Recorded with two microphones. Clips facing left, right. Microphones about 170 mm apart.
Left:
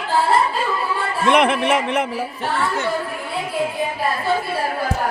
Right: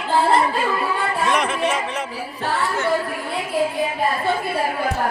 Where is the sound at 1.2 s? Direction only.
60° left (ahead or behind).